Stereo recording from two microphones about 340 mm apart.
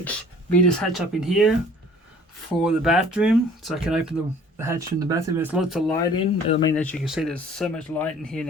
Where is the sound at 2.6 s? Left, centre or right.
Centre.